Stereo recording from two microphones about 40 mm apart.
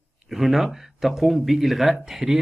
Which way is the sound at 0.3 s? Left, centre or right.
Centre.